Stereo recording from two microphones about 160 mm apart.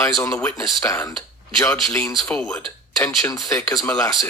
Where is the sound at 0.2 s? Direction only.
15° left (ahead or behind).